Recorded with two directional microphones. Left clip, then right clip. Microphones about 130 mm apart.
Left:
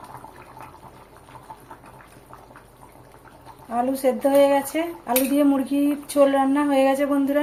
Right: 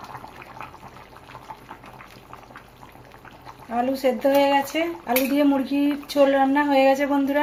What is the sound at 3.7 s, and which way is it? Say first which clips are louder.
Speech: even; centre (ahead or behind).